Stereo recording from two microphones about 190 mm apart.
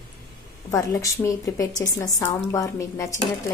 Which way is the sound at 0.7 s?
15° left (ahead or behind).